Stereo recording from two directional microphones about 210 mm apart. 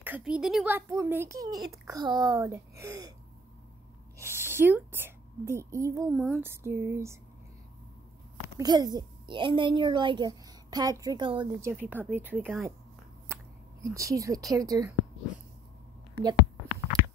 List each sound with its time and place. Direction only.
0.0 s speech: 5° right (ahead or behind)
4.2 s a sound: 10° right (ahead or behind)
6.1 s speech: centre (ahead or behind)
6.4 s speech: 10° right (ahead or behind)
8.5 s a child's voice: 20° right (ahead or behind)
11.7 s speech: 10° right (ahead or behind)
13.8 s speech: 15° right (ahead or behind)